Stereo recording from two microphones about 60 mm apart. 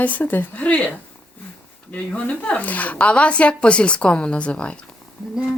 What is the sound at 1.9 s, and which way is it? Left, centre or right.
Speech, left.